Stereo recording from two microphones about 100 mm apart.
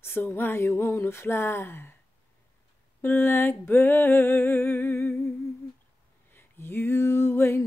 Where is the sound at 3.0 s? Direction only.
20° left (ahead or behind).